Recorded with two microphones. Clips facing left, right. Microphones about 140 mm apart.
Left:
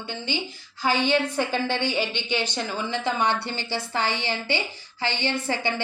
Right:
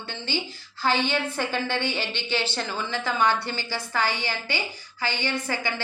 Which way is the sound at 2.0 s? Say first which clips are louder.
Left 2 dB; 15° left (ahead or behind).